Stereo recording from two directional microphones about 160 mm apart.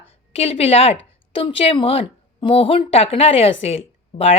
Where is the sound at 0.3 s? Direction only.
40° left (ahead or behind).